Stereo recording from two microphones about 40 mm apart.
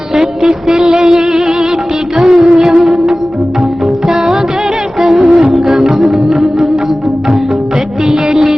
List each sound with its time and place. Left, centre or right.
0.7 s music: centre
4.9 s music: centre
8.3 s music: centre